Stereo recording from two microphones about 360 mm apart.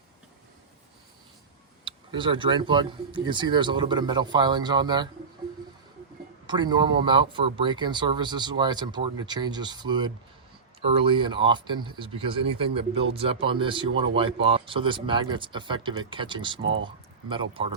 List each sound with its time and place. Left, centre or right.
1.8 s speech: centre
6.5 s speech: centre